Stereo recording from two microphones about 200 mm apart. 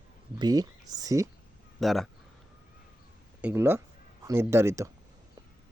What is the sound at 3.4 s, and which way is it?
Speech, 10° right (ahead or behind).